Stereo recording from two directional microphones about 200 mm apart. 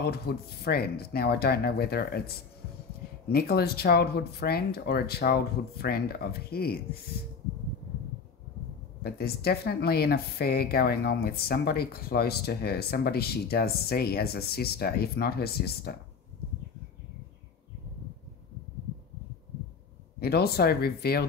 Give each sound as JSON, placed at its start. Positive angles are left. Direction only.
{"t": 0.0, "sound": "speech", "side_deg": 50}
{"t": 9.0, "sound": "speech", "side_deg": 50}
{"t": 20.2, "sound": "speech", "side_deg": 50}